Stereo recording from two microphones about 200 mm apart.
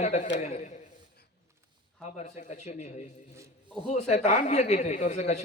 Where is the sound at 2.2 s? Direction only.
35° left (ahead or behind).